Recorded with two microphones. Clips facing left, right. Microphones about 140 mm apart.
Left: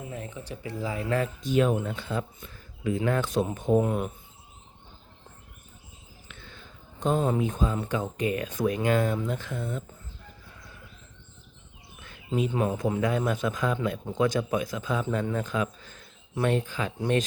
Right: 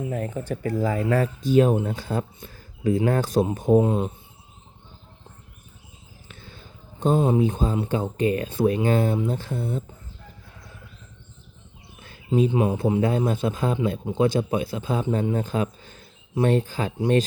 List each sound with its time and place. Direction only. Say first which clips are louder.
0.1 s speech: right 9 dB; 50° right (ahead or behind)
3.8 s speech: right 4 dB; 25° right (ahead or behind)
6.2 s a sound: right 3 dB; 35° right (ahead or behind)
7.3 s speech: right 5 dB; 30° right (ahead or behind)
11.9 s bird: right 1 dB; 35° right (ahead or behind)
12.5 s speech: right 5 dB; 20° right (ahead or behind)
12.7 s speech: right 4 dB; 30° right (ahead or behind)